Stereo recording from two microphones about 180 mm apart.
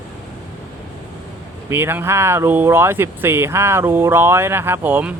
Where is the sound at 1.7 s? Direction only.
10° right (ahead or behind).